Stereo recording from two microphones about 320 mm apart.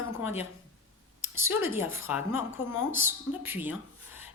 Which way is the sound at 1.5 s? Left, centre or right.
Centre.